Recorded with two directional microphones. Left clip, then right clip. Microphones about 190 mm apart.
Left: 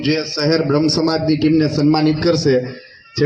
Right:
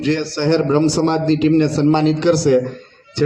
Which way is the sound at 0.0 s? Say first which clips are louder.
Left 1 dB; 40° left (ahead or behind).